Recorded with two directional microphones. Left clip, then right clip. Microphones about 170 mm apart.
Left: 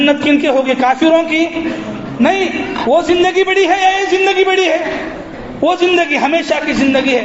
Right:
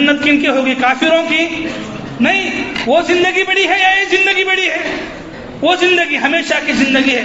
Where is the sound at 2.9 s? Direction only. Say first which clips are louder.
Even; 45° left (ahead or behind).